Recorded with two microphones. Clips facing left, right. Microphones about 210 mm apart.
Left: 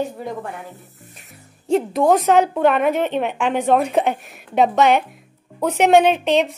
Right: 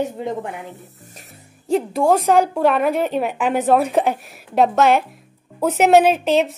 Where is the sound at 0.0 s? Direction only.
20° right (ahead or behind).